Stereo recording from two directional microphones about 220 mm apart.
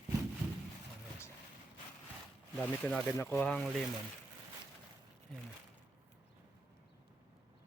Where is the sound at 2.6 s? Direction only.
5° left (ahead or behind).